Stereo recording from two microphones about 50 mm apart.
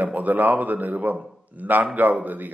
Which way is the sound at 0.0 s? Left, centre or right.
Right.